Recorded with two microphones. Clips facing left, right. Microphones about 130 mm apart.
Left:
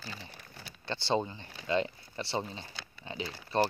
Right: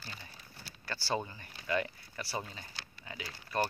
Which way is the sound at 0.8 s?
25° left (ahead or behind).